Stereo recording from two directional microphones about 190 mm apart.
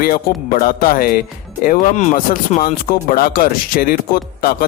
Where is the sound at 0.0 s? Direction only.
50° left (ahead or behind).